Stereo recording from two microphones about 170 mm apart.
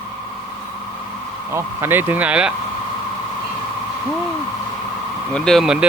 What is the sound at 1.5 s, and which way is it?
Speech, 15° right (ahead or behind).